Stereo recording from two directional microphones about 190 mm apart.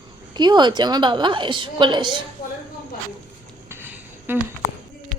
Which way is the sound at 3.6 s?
10° right (ahead or behind).